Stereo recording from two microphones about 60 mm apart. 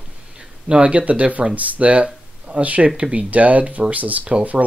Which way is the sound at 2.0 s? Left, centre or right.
Centre.